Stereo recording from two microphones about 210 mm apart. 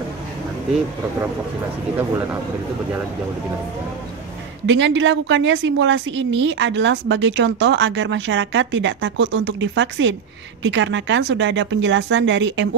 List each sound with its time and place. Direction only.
4.6 s a woman's voice: 60° right (ahead or behind)